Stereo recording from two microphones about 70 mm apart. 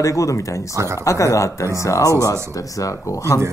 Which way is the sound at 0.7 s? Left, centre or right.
Right.